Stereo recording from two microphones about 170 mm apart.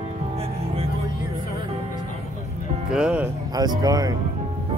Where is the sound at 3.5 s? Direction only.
25° right (ahead or behind).